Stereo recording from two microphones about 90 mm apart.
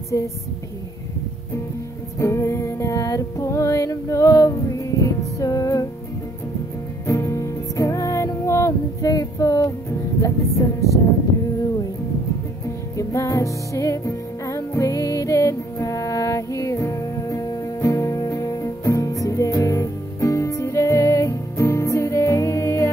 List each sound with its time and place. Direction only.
2.1 s music: 35° left (ahead or behind)
7.1 s music: 35° left (ahead or behind)
12.9 s music: 35° left (ahead or behind)